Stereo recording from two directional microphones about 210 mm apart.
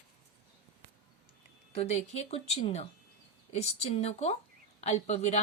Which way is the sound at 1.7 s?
30° left (ahead or behind).